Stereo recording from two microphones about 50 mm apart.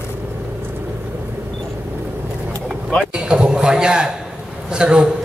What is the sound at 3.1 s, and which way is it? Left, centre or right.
A man's voice, centre.